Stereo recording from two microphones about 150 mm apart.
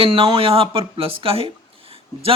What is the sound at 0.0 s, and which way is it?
Speech, 40° right (ahead or behind).